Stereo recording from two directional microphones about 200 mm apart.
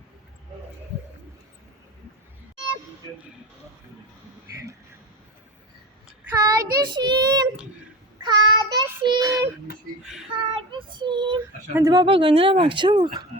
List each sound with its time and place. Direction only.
6.3 s child singing: 15° right (ahead or behind)
10.5 s speech: 25° right (ahead or behind)